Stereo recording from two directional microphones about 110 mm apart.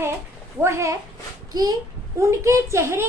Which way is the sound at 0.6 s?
25° right (ahead or behind).